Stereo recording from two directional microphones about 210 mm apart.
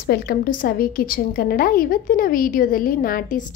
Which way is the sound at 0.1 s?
45° left (ahead or behind).